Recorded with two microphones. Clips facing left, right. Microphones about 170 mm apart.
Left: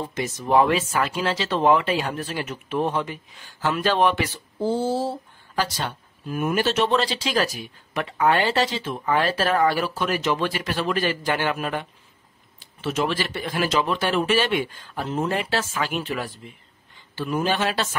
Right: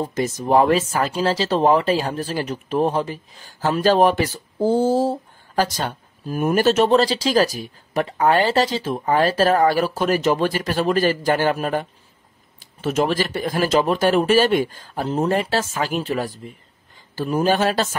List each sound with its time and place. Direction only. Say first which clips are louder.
0.0 s speech: right 5 dB; 40° right (ahead or behind)